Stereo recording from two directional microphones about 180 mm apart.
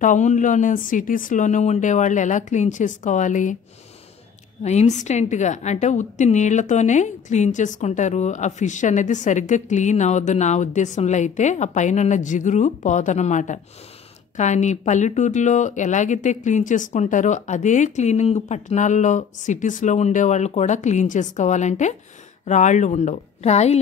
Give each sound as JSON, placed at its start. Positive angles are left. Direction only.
{"t": 0.0, "sound": "speech", "side_deg": 45}
{"t": 4.6, "sound": "a woman's voice", "side_deg": 40}